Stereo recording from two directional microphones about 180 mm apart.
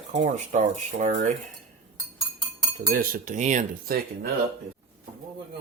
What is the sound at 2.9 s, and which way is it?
Speech, 45° right (ahead or behind).